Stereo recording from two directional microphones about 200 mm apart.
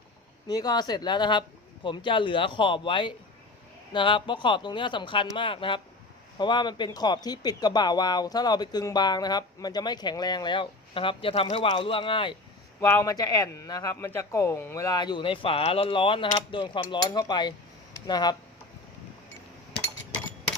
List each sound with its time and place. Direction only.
0.4 s speech: 20° left (ahead or behind)
12.8 s speech: 10° left (ahead or behind)